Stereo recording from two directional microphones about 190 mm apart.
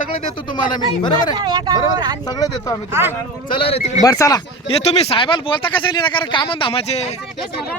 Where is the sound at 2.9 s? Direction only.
10° right (ahead or behind).